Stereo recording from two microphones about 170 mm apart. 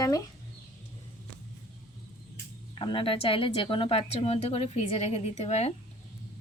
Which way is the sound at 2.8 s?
30° left (ahead or behind).